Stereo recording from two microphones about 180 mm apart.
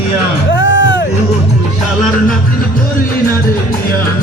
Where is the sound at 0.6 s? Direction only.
90° left.